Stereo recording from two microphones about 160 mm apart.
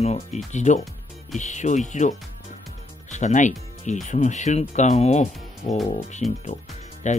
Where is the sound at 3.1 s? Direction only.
50° left (ahead or behind).